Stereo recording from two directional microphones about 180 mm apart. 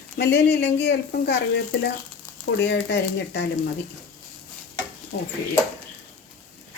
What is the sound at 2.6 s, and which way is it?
Speech, 70° left (ahead or behind).